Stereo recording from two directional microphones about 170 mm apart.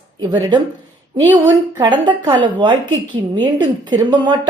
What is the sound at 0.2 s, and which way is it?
Speech, 25° right (ahead or behind).